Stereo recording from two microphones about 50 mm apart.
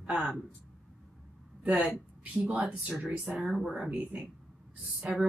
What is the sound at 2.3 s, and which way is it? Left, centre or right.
Speech, right.